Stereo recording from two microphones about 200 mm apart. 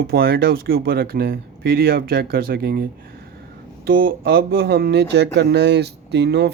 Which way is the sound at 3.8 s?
45° right (ahead or behind).